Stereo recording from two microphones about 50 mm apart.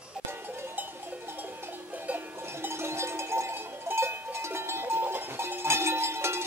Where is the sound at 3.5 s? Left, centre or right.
Right.